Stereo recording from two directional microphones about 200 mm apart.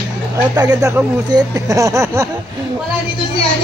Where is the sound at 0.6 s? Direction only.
20° right (ahead or behind).